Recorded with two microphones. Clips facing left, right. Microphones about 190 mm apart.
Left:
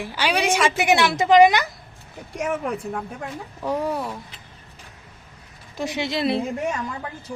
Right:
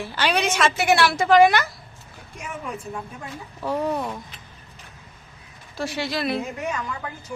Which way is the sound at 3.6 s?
10° left (ahead or behind).